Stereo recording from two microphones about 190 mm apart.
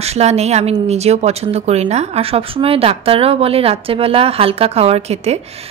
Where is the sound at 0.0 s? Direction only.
35° right (ahead or behind).